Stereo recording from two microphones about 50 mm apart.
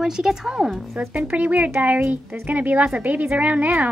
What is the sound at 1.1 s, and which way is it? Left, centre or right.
A child's voice, right.